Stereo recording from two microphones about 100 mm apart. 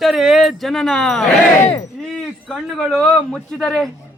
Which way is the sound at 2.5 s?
5° left (ahead or behind).